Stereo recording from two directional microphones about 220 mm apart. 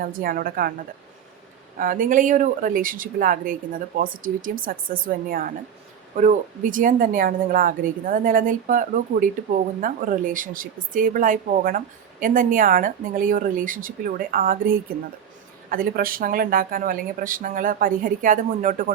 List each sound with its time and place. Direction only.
0.0 s speech: 40° right (ahead or behind)
1.8 s speech: 40° right (ahead or behind)